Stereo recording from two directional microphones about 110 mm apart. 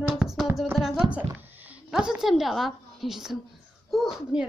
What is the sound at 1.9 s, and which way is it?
A woman's voice, 5° right (ahead or behind).